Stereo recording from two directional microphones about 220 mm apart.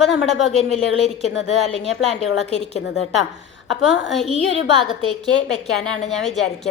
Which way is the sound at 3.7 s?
Centre (ahead or behind).